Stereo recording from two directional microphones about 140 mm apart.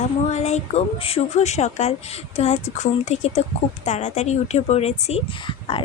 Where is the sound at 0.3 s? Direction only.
55° left (ahead or behind).